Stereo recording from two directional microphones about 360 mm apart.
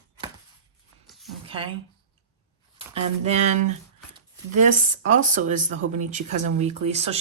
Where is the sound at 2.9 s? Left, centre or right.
Centre.